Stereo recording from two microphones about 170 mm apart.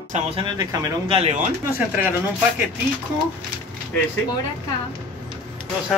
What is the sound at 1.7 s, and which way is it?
Speech, 10° right (ahead or behind).